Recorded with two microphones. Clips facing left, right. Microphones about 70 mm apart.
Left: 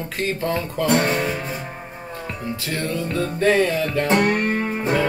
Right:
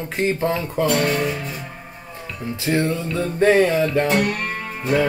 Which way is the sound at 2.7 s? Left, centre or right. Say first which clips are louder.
Right 6 dB; right.